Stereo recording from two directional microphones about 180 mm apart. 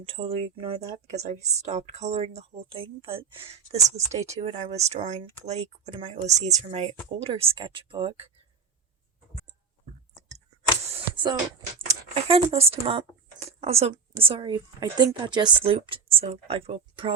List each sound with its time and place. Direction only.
0.0 s speech: 30° right (ahead or behind)
11.9 s speech: 35° right (ahead or behind)